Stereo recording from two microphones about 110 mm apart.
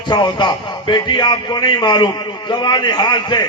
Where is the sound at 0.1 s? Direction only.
40° left (ahead or behind).